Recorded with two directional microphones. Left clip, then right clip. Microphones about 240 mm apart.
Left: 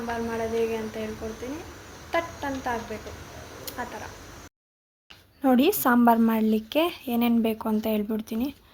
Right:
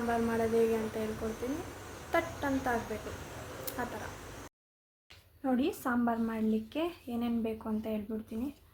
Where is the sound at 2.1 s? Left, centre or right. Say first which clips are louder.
Left 4 dB; centre.